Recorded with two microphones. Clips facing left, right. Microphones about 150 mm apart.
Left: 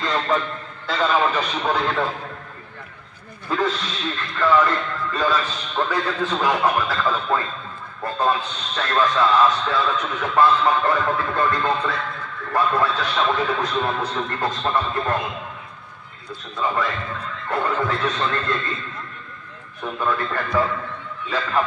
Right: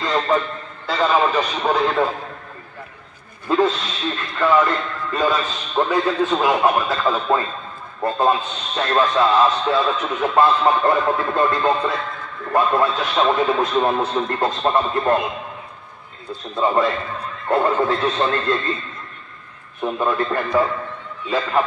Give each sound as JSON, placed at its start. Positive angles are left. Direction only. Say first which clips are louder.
{"t": 0.0, "sound": "a sound", "louder": "right 3 dB", "side_deg": -15}
{"t": 0.8, "sound": "a man's voice", "louder": "right 2 dB", "side_deg": -10}
{"t": 3.4, "sound": "a sound", "louder": "right 5 dB", "side_deg": -25}
{"t": 4.4, "sound": "a man's voice", "louder": "right 1 dB", "side_deg": -20}
{"t": 16.5, "sound": "a man's voice", "louder": "right 5 dB", "side_deg": -30}
{"t": 19.8, "sound": "a man's voice", "louder": "right 4 dB", "side_deg": -25}